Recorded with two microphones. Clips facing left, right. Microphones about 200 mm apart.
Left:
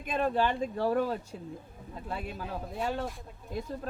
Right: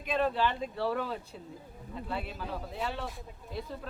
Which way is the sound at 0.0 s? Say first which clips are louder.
Left 1 dB; 50° left (ahead or behind).